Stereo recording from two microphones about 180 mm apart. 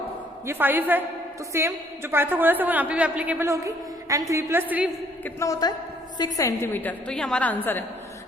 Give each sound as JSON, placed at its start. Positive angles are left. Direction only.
{"t": 0.4, "sound": "a woman's voice", "side_deg": -10}
{"t": 5.2, "sound": "a woman's voice", "side_deg": 15}